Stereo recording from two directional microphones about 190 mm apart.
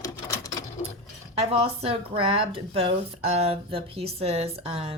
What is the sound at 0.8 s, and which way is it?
Cutlery, 30° left (ahead or behind).